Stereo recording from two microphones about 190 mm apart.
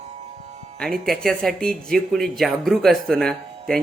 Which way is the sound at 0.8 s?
Centre (ahead or behind).